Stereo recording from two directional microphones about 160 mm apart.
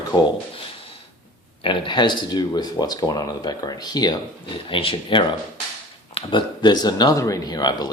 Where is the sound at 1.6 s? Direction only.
30° left (ahead or behind).